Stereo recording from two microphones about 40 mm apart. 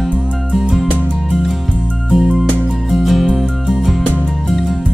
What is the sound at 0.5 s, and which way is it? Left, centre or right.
Music, centre.